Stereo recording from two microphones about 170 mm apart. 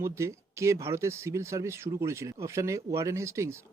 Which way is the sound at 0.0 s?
15° right (ahead or behind).